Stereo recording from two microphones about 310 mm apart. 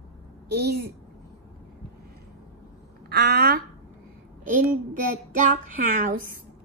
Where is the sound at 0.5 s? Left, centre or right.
Right.